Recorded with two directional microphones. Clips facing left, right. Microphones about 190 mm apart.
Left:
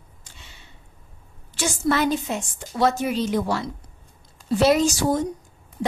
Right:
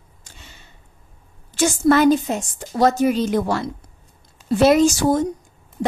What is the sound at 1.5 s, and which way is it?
A woman's voice, 45° right (ahead or behind).